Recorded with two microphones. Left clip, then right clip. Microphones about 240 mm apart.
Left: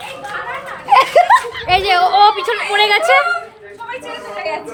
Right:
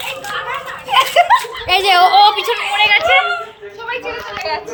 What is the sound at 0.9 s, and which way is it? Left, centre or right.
Speech, left.